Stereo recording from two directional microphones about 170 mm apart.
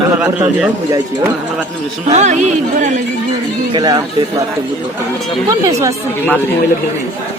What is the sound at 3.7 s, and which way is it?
Speech, 25° right (ahead or behind).